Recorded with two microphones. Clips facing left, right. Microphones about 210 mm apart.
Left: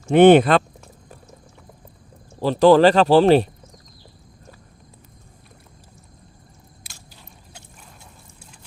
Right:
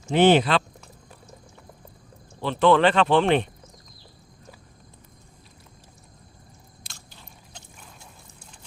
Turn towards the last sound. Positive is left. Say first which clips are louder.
# left 1 dB
turn(degrees=5)  # may be behind; listen again after turning